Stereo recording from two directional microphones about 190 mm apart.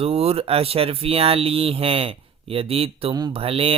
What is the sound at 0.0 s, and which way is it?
Speech, 30° right (ahead or behind).